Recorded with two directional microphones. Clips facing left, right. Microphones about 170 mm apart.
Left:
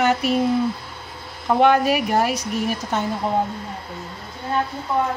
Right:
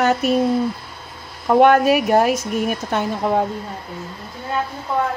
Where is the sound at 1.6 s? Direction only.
50° right (ahead or behind).